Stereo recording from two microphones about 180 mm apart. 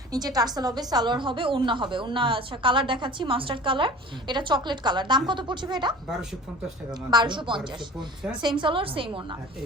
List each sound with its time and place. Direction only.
0.1 s a woman's voice: 20° right (ahead or behind)
7.1 s a woman's voice: 25° right (ahead or behind)